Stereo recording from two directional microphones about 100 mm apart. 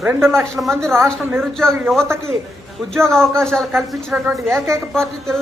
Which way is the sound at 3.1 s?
5° left (ahead or behind).